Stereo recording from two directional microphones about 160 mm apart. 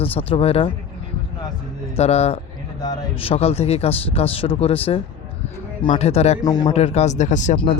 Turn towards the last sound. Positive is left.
turn(degrees=50)  # may be behind; listen again after turning